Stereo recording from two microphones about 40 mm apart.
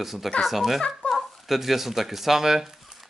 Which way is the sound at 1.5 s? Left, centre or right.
Centre.